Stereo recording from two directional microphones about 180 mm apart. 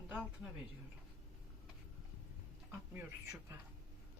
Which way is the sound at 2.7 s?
10° right (ahead or behind).